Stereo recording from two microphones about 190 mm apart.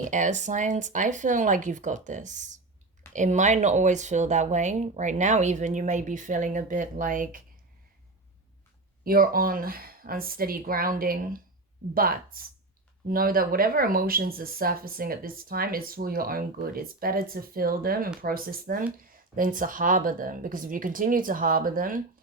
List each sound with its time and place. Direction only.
0.0 s speech: 40° right (ahead or behind)
9.0 s speech: 50° right (ahead or behind)